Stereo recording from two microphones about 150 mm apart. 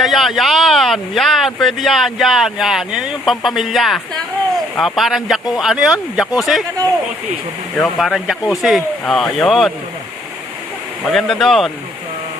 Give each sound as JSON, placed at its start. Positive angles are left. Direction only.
{"t": 0.0, "sound": "speech", "side_deg": 0}
{"t": 7.8, "sound": "speech", "side_deg": 0}
{"t": 11.1, "sound": "speech", "side_deg": 5}